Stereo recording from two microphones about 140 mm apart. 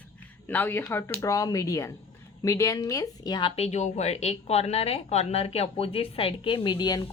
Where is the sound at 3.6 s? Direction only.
55° left (ahead or behind).